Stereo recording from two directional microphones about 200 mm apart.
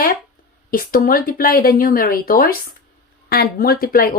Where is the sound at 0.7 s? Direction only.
45° left (ahead or behind).